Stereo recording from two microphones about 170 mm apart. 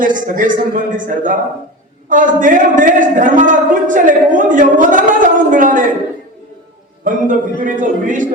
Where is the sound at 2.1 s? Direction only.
50° right (ahead or behind).